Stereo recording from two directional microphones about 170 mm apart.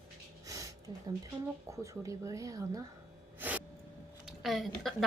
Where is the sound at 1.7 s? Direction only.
20° right (ahead or behind).